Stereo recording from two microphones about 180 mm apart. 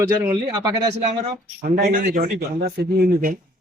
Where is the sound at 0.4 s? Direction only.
30° right (ahead or behind).